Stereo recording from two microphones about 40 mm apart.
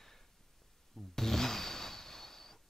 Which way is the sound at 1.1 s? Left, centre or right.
Centre.